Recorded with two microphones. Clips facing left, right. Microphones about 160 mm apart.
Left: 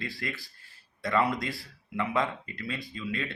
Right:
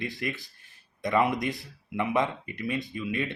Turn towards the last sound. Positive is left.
turn(degrees=-20)  # may be behind; listen again after turning